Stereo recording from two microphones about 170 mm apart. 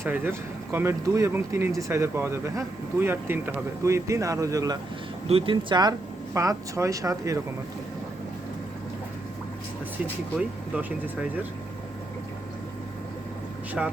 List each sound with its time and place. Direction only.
0.0 s speech: 15° right (ahead or behind)
10.3 s speech: 10° right (ahead or behind)
13.8 s speech: 5° right (ahead or behind)